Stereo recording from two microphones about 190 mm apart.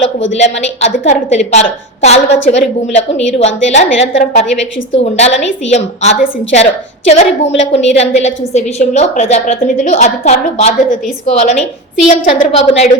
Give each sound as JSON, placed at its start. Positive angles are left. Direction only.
{"t": 0.3, "sound": "a woman's voice", "side_deg": 35}